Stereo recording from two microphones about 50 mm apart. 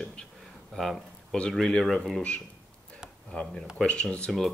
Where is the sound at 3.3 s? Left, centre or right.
Left.